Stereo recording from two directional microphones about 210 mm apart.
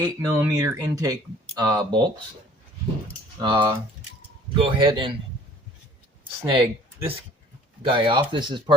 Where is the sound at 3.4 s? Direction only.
20° right (ahead or behind).